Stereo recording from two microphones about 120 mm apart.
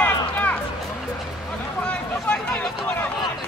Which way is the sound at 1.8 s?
10° left (ahead or behind).